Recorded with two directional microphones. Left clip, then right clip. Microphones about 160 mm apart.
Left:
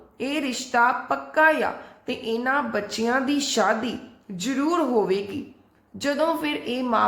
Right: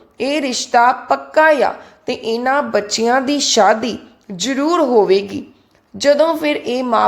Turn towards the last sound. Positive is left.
turn(degrees=-30)  # may be behind; listen again after turning